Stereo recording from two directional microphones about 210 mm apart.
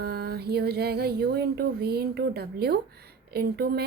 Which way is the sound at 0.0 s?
50° right (ahead or behind).